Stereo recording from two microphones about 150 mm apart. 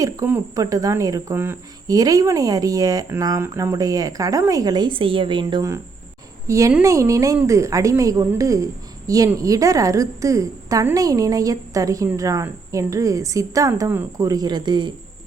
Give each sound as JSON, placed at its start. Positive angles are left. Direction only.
{"t": 0.0, "sound": "a woman's voice", "side_deg": -15}